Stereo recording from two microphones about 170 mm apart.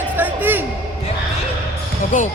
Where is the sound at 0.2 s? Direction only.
10° right (ahead or behind).